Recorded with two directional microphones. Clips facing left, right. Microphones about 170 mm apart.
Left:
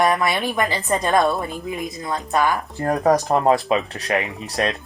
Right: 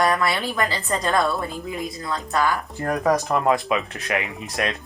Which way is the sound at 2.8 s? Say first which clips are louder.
Left 3 dB; 35° left (ahead or behind).